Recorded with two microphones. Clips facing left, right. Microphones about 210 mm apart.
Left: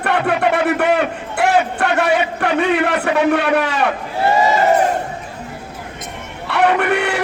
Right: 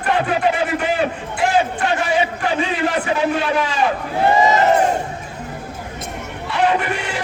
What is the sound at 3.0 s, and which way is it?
Speech, 65° left (ahead or behind).